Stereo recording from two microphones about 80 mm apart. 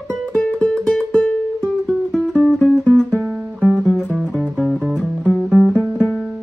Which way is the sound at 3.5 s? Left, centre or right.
Centre.